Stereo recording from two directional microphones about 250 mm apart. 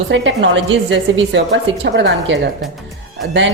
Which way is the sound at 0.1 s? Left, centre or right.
Right.